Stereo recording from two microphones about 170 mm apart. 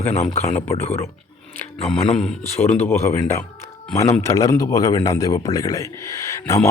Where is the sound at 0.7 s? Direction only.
35° left (ahead or behind).